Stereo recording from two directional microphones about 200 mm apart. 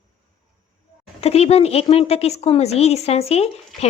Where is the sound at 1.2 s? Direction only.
30° left (ahead or behind).